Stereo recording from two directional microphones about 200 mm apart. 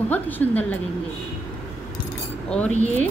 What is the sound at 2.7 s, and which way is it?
Speech, 35° right (ahead or behind).